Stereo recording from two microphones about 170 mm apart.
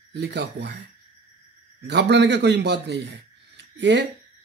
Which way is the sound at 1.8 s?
85° right.